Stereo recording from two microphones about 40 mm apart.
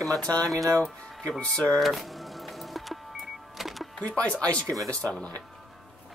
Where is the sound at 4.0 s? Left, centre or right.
Left.